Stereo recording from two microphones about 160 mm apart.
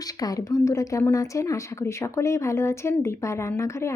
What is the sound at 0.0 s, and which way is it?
A woman's voice, 25° left (ahead or behind).